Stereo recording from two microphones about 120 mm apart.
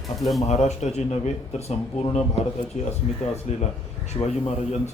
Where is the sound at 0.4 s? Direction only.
65° left (ahead or behind).